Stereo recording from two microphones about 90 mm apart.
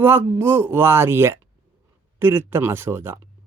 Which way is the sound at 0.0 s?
25° right (ahead or behind).